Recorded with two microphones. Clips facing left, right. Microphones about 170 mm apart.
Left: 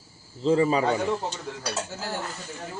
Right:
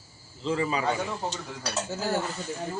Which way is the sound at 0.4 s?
35° left (ahead or behind).